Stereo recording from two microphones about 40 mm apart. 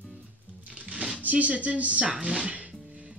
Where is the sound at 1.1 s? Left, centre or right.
Right.